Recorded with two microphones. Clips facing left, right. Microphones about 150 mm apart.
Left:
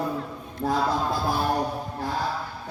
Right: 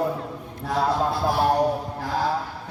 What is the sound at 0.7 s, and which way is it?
Speech, 70° right (ahead or behind).